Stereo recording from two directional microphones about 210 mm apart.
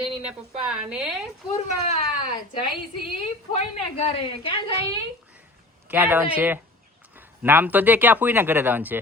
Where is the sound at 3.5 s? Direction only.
30° left (ahead or behind).